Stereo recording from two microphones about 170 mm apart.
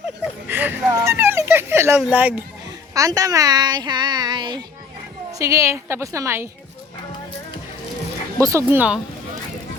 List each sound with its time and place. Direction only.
0.4 s a sound: 10° right (ahead or behind)
2.0 s a woman's voice: 10° right (ahead or behind)
8.4 s a woman's voice: 15° right (ahead or behind)